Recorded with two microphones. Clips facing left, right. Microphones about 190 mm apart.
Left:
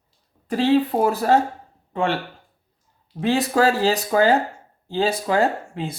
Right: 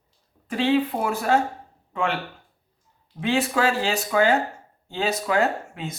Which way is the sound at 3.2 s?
40° left (ahead or behind).